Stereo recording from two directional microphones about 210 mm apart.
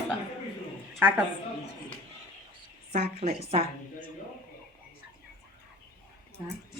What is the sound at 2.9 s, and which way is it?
Speech, 30° right (ahead or behind).